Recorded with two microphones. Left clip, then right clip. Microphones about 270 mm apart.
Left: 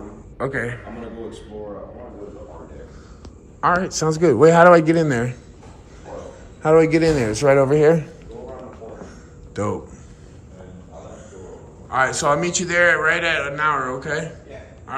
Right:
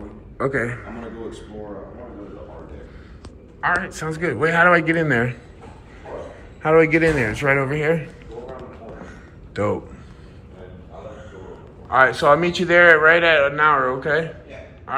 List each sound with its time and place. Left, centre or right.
0.4 s a man's voice: centre
3.8 s a man's voice: left
6.6 s a man's voice: centre
9.5 s speech: centre
11.9 s a man's voice: centre